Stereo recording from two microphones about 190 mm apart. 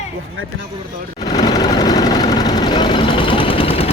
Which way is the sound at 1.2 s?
20° left (ahead or behind).